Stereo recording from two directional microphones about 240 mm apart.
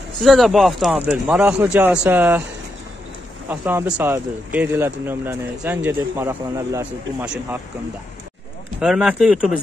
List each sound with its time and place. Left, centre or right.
0.2 s speech: centre
3.4 s speech: centre
8.8 s speech: centre